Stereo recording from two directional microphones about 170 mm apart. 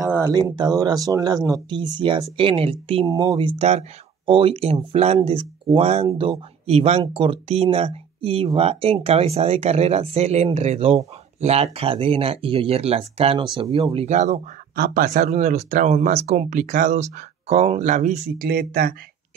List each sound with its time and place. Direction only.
0.0 s speech: 20° right (ahead or behind); by 14.4 s 45° right (ahead or behind)
14.8 s speech: 55° right (ahead or behind)